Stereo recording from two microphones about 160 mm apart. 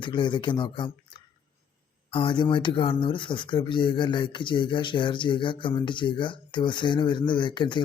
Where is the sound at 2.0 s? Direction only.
30° left (ahead or behind).